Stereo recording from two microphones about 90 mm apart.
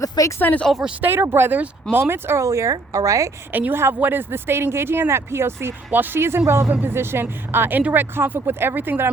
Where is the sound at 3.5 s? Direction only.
25° right (ahead or behind).